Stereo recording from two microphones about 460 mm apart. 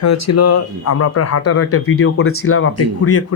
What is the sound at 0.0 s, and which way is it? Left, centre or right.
Speech, left.